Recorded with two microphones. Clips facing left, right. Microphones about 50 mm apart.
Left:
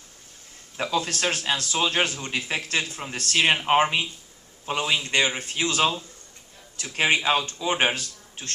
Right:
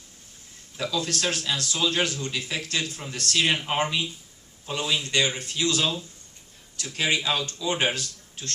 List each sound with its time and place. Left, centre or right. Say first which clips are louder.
0.8 s a man's voice: left 2 dB; left